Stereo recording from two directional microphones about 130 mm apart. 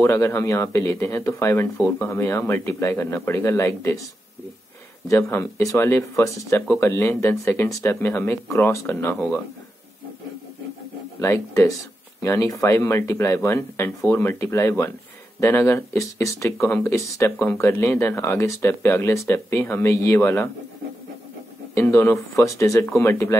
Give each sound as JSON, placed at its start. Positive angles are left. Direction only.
{"t": 0.0, "sound": "speech", "side_deg": 25}
{"t": 5.0, "sound": "speech", "side_deg": 20}
{"t": 11.1, "sound": "speech", "side_deg": 25}
{"t": 21.7, "sound": "speech", "side_deg": 20}